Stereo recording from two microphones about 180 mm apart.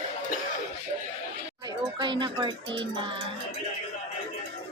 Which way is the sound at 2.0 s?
25° right (ahead or behind).